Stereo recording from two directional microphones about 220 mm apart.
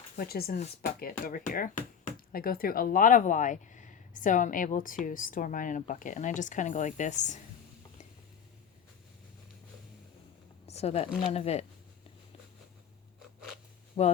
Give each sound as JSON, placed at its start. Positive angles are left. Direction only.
{"t": 0.2, "sound": "speech", "side_deg": 45}
{"t": 10.7, "sound": "speech", "side_deg": 30}
{"t": 14.0, "sound": "speech", "side_deg": 30}